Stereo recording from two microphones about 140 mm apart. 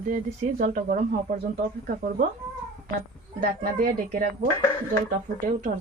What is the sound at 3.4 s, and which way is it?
Speech, 75° right (ahead or behind).